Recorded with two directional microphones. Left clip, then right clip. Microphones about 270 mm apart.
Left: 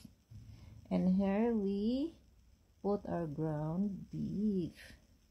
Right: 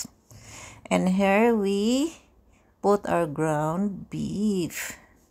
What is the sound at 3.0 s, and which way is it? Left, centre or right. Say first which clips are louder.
Speech: right 15 dB; right.